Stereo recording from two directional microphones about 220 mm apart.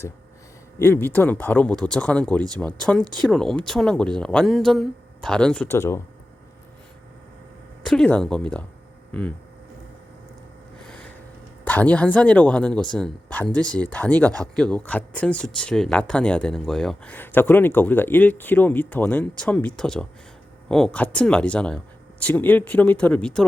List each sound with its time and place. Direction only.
0.8 s speech: 10° left (ahead or behind)
3.0 s speech: 20° right (ahead or behind)
3.2 s speech: centre (ahead or behind)
7.9 s speech: 5° left (ahead or behind)
10.8 s vehicle: 5° left (ahead or behind)
11.6 s speech: 5° left (ahead or behind)